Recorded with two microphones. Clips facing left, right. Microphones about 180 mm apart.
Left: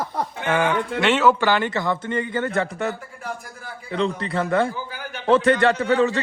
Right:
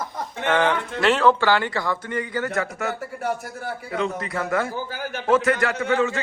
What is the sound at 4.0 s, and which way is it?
Speech, 30° left (ahead or behind).